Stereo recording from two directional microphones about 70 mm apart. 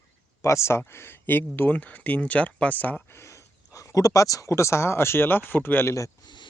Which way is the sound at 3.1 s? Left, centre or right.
Left.